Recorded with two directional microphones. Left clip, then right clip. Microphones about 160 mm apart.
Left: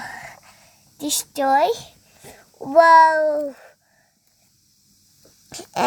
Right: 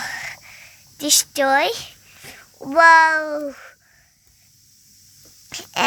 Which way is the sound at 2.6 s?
40° left (ahead or behind).